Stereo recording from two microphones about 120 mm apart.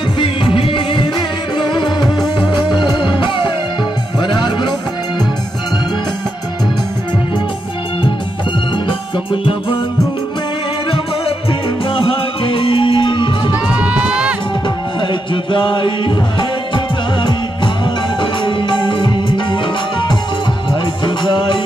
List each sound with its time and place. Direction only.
0.6 s music: 45° left (ahead or behind)
8.8 s music: 45° left (ahead or behind)
11.9 s music: 50° left (ahead or behind)
13.7 s crowd: 10° right (ahead or behind)
15.0 s music: 45° left (ahead or behind)